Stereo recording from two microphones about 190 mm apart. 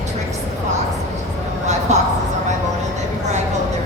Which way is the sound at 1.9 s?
40° right (ahead or behind).